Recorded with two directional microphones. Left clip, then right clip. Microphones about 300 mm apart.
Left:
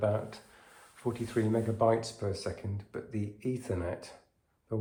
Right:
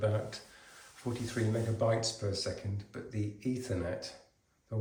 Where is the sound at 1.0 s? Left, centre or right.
Left.